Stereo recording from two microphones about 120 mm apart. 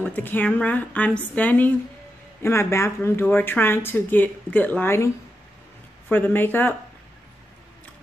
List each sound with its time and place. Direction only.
0.0 s a woman's voice: 15° left (ahead or behind)